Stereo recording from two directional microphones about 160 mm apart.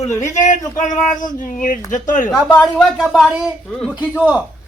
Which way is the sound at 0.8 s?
50° left (ahead or behind).